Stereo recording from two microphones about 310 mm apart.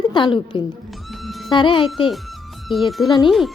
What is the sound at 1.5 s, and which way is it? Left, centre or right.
Speech, centre.